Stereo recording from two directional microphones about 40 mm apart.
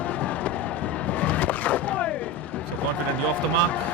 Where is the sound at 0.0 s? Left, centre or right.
Left.